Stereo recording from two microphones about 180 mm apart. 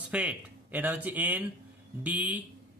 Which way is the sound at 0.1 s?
10° right (ahead or behind).